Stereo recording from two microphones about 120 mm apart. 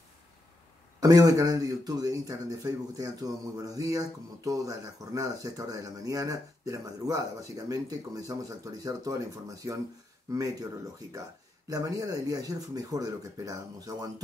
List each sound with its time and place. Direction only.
1.0 s speech: 30° right (ahead or behind)
11.7 s speech: 30° right (ahead or behind)